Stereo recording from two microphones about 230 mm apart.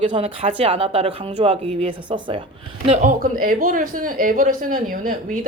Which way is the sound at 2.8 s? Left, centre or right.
Right.